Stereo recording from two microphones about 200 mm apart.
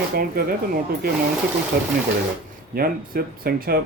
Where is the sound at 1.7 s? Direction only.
50° right (ahead or behind).